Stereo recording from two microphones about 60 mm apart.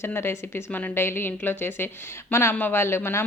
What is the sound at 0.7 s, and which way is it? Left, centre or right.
Speech, left.